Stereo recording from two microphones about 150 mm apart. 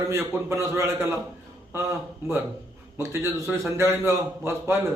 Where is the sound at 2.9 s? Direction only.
20° right (ahead or behind).